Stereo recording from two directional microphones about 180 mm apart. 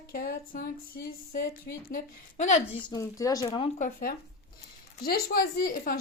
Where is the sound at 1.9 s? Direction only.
45° left (ahead or behind).